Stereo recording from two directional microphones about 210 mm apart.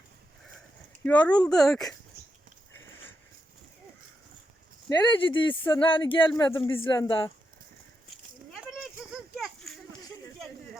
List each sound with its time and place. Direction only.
1.0 s speech: 5° left (ahead or behind)
4.9 s speech: 20° left (ahead or behind)
9.4 s a sound: centre (ahead or behind)